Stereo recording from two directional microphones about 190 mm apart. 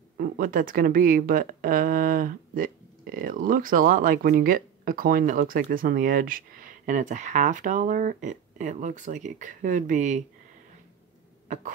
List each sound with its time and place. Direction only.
0.2 s speech: 45° right (ahead or behind)
11.4 s hiccup: 40° right (ahead or behind)